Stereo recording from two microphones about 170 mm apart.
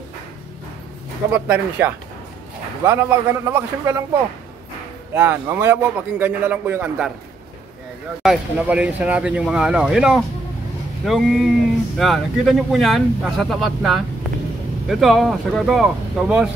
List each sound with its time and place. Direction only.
1.3 s a man's voice: 10° right (ahead or behind)
5.1 s a man's voice: 10° right (ahead or behind)
8.2 s speech: 5° right (ahead or behind)